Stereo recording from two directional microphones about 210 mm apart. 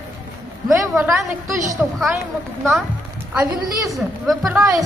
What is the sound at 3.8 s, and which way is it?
Speech, centre (ahead or behind).